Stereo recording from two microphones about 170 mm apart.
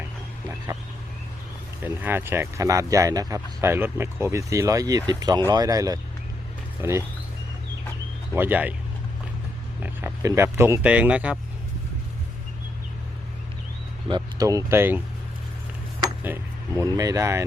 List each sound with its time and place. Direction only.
1.8 s speech: 10° right (ahead or behind)
8.4 s speech: 10° right (ahead or behind)
9.8 s speech: 15° right (ahead or behind)
14.1 s speech: 20° right (ahead or behind)
16.2 s speech: 15° right (ahead or behind)